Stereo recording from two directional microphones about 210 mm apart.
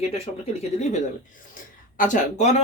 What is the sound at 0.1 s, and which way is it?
Speech, 30° left (ahead or behind).